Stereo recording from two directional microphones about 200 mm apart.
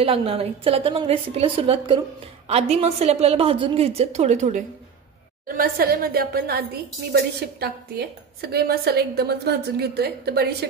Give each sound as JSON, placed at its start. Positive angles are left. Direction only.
{"t": 0.0, "sound": "a woman's voice", "side_deg": -30}
{"t": 5.6, "sound": "a woman's voice", "side_deg": -50}